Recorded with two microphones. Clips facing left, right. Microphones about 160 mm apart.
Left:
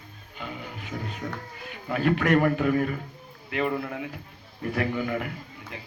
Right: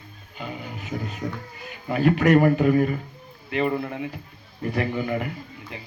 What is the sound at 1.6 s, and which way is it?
Speech, 5° right (ahead or behind).